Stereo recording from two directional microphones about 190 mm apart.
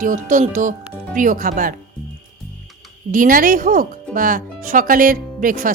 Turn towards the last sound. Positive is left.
turn(degrees=-45)  # may be behind; listen again after turning